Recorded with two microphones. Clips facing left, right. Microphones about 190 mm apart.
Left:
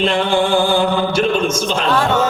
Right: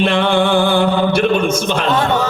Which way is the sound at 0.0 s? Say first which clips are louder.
Right 2 dB; 60° right (ahead or behind).